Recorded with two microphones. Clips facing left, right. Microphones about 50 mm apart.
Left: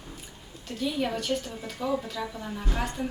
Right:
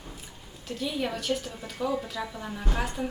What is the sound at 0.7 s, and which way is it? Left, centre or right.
A woman's voice, centre.